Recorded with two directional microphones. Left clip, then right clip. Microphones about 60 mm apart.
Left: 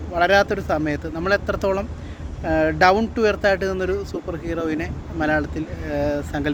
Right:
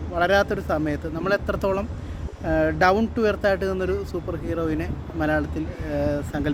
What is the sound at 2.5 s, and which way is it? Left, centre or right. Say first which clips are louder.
Speech: left 3 dB; centre.